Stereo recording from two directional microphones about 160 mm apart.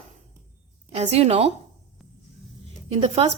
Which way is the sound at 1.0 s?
40° right (ahead or behind).